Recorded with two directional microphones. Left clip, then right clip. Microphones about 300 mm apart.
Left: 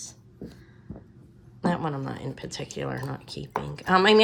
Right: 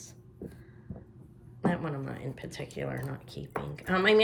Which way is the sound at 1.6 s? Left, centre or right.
Centre.